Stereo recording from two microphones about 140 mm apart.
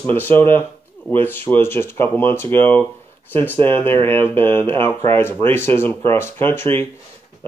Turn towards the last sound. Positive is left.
turn(degrees=15)  # may be behind; listen again after turning